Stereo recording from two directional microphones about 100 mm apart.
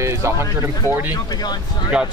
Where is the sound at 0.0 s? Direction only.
30° right (ahead or behind).